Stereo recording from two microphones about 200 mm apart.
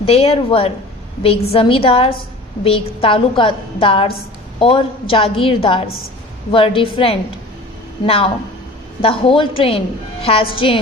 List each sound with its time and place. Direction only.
0.0 s a woman's voice: 30° left (ahead or behind)